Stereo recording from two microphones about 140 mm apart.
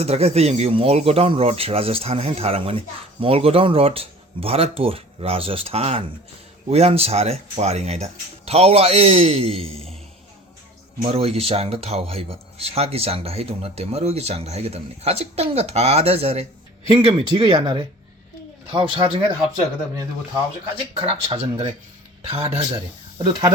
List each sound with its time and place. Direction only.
0.0 s speech: 45° right (ahead or behind)
11.0 s speech: 45° right (ahead or behind)
21.2 s speech: 45° right (ahead or behind)
23.1 s speech: 30° right (ahead or behind)